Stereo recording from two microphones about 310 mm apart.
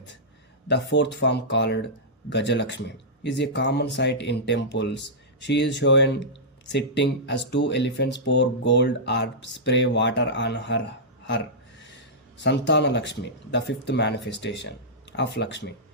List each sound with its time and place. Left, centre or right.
0.7 s speech: left
11.3 s a sound: left
12.4 s speech: left